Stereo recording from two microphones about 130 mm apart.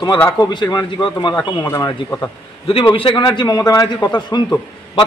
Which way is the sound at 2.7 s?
45° left (ahead or behind).